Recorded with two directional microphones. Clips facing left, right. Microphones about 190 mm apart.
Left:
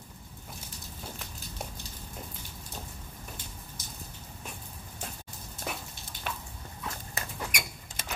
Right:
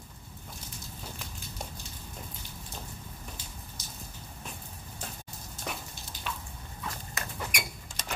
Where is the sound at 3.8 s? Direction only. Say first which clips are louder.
Left 1 dB; 55° left (ahead or behind).